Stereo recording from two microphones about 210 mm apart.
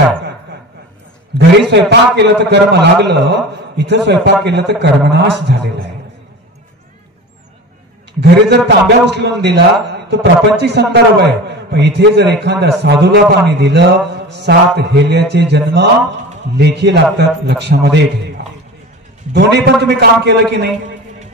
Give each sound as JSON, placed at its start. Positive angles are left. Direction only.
{"t": 1.7, "sound": "a man's voice", "side_deg": -55}
{"t": 8.2, "sound": "a man's voice", "side_deg": -55}
{"t": 19.3, "sound": "a man's voice", "side_deg": -50}